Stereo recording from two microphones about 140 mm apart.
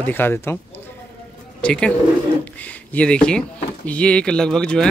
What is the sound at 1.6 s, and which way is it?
Speech, 5° left (ahead or behind).